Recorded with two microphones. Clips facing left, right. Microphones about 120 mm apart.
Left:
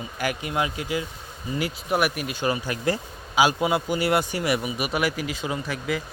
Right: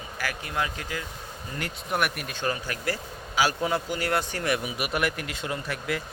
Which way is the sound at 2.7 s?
20° left (ahead or behind).